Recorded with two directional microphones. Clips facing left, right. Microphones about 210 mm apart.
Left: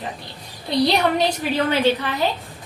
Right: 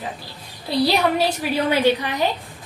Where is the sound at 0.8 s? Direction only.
5° right (ahead or behind).